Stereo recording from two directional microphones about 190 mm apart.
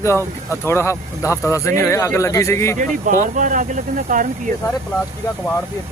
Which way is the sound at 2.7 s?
45° right (ahead or behind).